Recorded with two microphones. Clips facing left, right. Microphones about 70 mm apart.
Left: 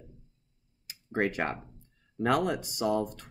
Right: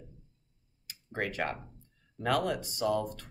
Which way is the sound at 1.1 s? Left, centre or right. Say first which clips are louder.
Left 4 dB; left.